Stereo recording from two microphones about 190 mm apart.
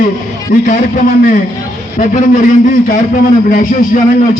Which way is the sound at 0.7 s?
45° left (ahead or behind).